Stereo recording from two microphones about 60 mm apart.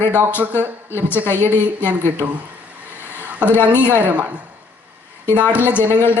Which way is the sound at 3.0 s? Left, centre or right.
Right.